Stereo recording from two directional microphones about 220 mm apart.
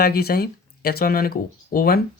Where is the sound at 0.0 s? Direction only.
45° left (ahead or behind).